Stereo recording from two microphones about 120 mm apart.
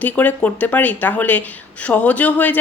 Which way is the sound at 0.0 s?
15° left (ahead or behind).